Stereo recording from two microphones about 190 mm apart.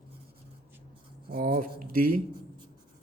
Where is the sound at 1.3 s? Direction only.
50° right (ahead or behind).